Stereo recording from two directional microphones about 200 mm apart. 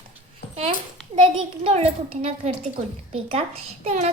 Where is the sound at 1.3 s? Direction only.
30° right (ahead or behind).